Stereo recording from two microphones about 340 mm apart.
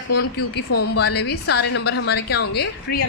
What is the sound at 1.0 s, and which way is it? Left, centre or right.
A woman's voice, left.